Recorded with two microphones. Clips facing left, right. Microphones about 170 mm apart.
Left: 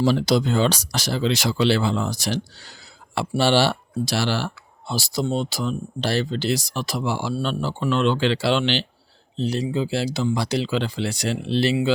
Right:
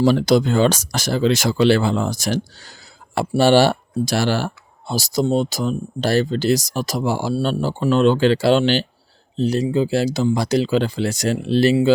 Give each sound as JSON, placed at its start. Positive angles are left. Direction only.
{"t": 0.0, "sound": "speech", "side_deg": -55}